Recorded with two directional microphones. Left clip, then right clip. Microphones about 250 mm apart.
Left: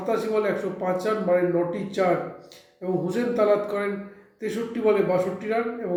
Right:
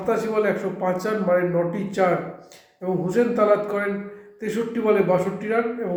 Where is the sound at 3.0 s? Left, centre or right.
Centre.